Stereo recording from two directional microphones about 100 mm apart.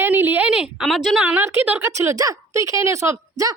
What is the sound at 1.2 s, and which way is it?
A woman's voice, 20° right (ahead or behind).